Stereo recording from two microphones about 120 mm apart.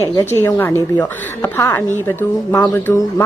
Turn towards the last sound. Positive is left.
turn(degrees=10)  # may be behind; listen again after turning